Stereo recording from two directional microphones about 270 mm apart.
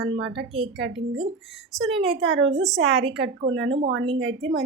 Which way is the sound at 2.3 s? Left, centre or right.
Right.